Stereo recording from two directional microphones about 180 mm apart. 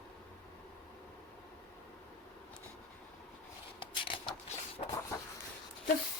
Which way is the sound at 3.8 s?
30° left (ahead or behind).